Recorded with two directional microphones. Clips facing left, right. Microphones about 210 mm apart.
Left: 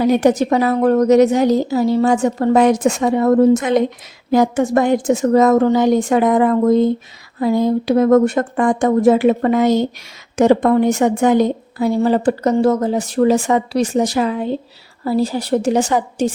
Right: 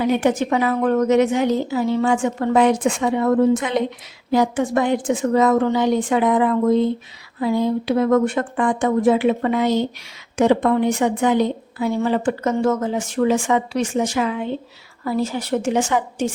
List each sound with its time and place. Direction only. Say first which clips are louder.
0.0 s a woman's voice: left 5 dB; 40° left (ahead or behind)